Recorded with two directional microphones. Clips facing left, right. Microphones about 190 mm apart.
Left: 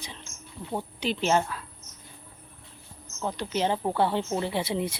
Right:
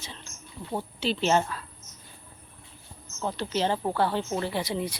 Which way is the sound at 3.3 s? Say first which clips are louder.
Even; 15° left (ahead or behind).